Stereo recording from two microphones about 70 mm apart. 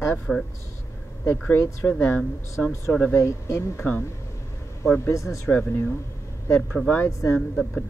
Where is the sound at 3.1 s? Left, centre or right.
Left.